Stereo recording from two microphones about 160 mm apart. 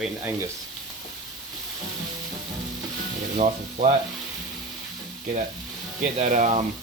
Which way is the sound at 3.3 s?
45° right (ahead or behind).